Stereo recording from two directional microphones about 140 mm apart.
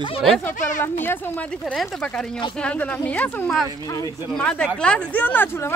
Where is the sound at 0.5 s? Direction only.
65° left (ahead or behind).